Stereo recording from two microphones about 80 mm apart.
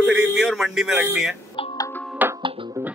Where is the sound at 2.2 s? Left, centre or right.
Right.